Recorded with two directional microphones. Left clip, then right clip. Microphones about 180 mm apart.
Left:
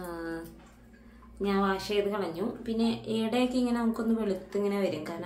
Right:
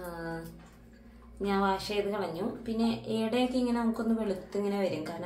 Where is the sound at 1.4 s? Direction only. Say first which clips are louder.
Even; 20° left (ahead or behind).